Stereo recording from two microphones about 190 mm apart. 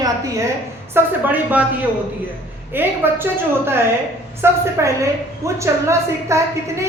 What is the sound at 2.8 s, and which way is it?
A woman's voice, 10° right (ahead or behind).